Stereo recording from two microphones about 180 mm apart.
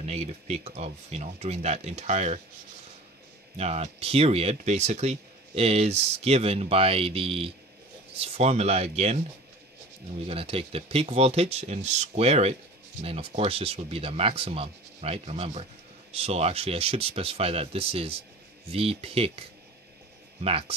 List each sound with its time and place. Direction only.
0.0 s speech: 35° right (ahead or behind)
3.5 s speech: 35° right (ahead or behind)
10.2 s speech: 30° right (ahead or behind)
20.4 s speech: 35° right (ahead or behind)